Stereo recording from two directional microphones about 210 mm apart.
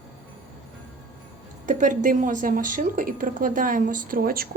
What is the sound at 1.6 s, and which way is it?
A woman's voice, 40° right (ahead or behind).